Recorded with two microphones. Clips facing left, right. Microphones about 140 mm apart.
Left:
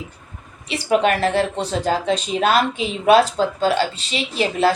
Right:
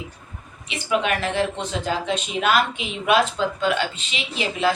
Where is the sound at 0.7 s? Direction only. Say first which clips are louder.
Left 5 dB; 40° left (ahead or behind).